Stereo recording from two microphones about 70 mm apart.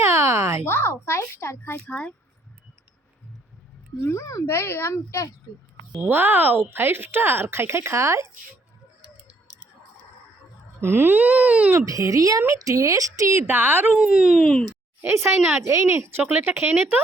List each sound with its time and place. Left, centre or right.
0.0 s a sound: right
0.7 s a child's voice: left
1.9 s speech: centre
4.0 s speech: left
4.5 s a child's voice: left
6.0 s speech: right
10.8 s a sound: right
11.9 s speech: right
13.5 s a sound: right
14.0 s speech: centre
14.3 s speech: centre
15.0 s speech: right
15.6 s speech: right
16.2 s a sound: right